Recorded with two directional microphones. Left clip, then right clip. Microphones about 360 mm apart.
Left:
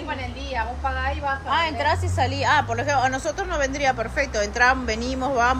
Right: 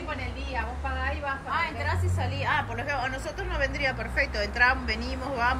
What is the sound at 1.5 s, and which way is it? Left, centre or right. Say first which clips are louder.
A woman's voice: left 9 dB; centre.